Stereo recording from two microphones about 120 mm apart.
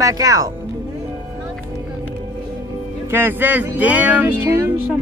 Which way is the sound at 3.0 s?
20° right (ahead or behind).